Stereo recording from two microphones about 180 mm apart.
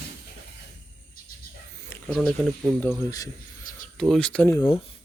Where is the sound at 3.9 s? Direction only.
Centre (ahead or behind).